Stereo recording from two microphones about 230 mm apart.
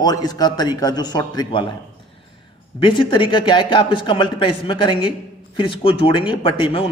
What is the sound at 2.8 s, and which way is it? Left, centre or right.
Speech, left.